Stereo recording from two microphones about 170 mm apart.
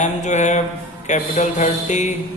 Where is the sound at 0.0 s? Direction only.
45° left (ahead or behind).